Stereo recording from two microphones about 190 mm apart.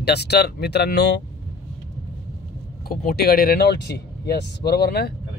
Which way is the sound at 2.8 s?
50° left (ahead or behind).